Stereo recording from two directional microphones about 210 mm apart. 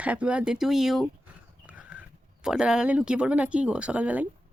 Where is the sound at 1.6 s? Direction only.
5° right (ahead or behind).